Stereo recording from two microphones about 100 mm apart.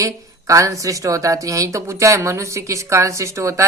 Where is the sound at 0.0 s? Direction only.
35° right (ahead or behind).